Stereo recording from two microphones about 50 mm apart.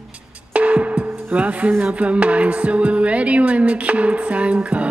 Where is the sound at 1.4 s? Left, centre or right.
Right.